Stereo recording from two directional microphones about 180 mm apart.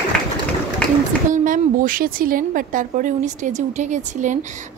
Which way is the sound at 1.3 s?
50° right (ahead or behind).